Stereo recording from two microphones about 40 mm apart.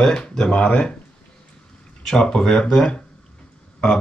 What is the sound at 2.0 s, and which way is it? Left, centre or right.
Speech, centre.